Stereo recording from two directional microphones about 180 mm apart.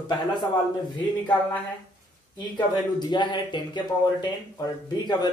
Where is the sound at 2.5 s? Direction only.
25° left (ahead or behind).